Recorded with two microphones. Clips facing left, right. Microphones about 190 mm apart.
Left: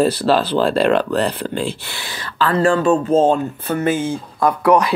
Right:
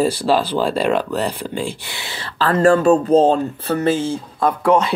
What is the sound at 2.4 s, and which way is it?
Speech, 40° right (ahead or behind).